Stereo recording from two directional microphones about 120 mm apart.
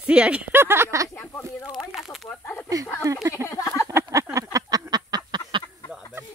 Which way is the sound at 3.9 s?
25° right (ahead or behind).